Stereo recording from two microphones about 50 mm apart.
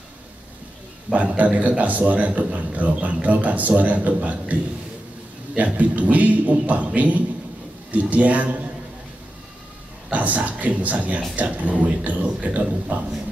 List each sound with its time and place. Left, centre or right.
1.1 s a man's voice: right
5.6 s a man's voice: right
10.1 s a man's voice: right